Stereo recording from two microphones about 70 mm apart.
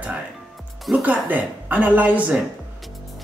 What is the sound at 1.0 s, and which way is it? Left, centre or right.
Speech, right.